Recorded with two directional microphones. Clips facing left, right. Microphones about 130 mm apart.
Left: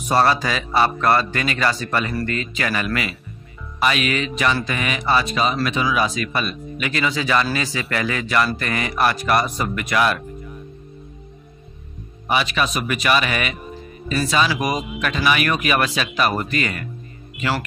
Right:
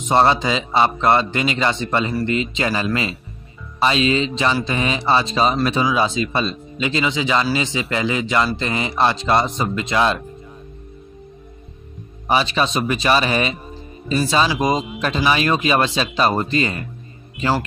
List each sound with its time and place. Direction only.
0.0 s speech: 25° right (ahead or behind)
12.3 s speech: 30° right (ahead or behind)